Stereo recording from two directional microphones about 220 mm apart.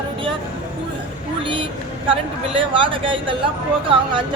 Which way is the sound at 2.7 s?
25° right (ahead or behind).